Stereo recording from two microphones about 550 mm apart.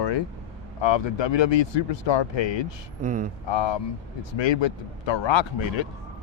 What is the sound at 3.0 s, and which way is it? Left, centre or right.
Speech, centre.